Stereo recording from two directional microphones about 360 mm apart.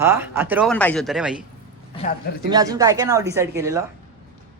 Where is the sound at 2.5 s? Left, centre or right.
Centre.